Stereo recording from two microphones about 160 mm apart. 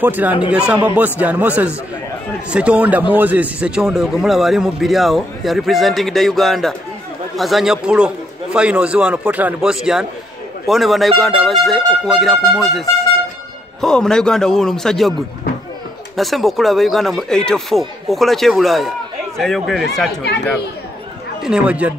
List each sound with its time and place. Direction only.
0.0 s a man's voice: 10° right (ahead or behind)
16.2 s a man's voice: centre (ahead or behind)
21.4 s a man's voice: 5° right (ahead or behind)